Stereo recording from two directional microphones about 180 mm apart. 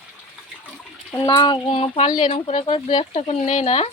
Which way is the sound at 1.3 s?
25° left (ahead or behind).